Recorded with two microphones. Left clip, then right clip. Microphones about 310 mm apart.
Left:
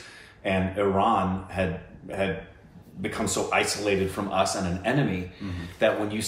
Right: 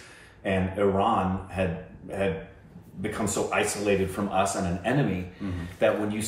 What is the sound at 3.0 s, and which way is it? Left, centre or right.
Speech, centre.